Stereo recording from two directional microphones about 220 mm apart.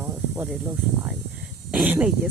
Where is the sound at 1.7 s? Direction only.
5° right (ahead or behind).